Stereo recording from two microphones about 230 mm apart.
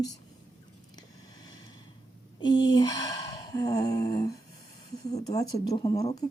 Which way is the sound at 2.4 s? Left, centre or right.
Left.